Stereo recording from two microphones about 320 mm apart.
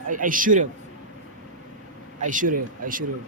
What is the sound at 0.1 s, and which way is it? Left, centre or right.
Speech, right.